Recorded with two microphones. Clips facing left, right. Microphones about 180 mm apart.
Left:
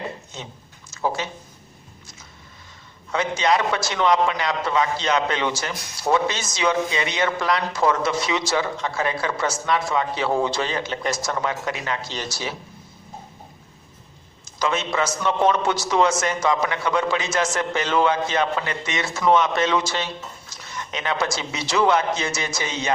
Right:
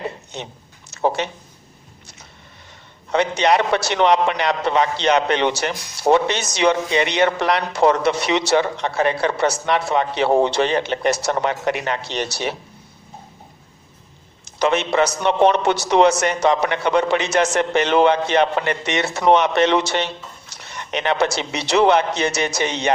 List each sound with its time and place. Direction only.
0.3 s speech: 65° right (ahead or behind)
3.1 s a man's voice: 65° right (ahead or behind)
14.4 s a sound: 65° right (ahead or behind)
14.9 s a man's voice: 65° right (ahead or behind)